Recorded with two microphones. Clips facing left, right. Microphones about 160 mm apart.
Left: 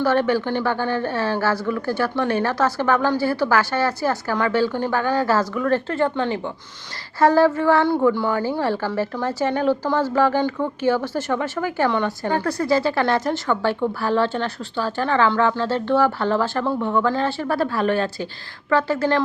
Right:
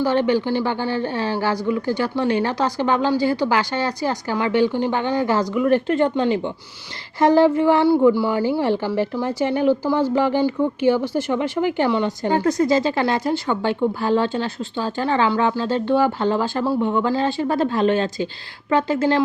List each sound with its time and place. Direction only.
0.0 s a woman's voice: 15° right (ahead or behind)